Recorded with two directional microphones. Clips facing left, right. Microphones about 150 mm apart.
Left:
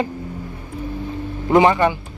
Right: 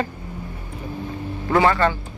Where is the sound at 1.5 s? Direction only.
20° left (ahead or behind).